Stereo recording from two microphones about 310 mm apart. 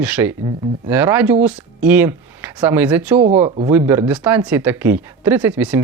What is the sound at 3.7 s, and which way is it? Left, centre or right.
Speech, centre.